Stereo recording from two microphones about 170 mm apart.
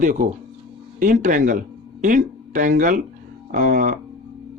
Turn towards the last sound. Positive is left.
turn(degrees=-50)  # may be behind; listen again after turning